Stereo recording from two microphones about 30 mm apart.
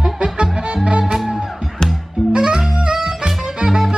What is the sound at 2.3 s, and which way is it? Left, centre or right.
Music, right.